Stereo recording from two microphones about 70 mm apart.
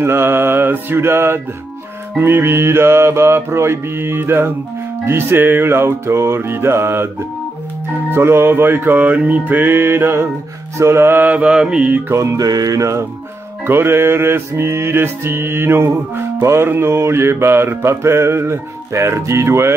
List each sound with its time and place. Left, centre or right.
0.0 s mantra: right
8.1 s mantra: right
11.4 s mantra: centre
12.1 s music: right
13.7 s mantra: right